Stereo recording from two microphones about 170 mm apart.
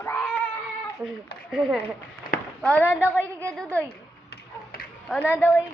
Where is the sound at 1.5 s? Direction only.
5° right (ahead or behind).